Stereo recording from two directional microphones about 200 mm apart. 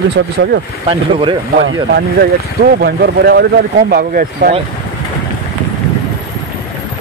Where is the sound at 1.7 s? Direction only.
55° right (ahead or behind).